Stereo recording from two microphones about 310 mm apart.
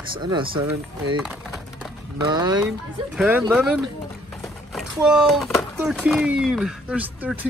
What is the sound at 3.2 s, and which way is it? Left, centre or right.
Speech, centre.